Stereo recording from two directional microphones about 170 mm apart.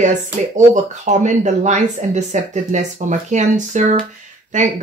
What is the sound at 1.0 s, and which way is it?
Speech, 45° right (ahead or behind).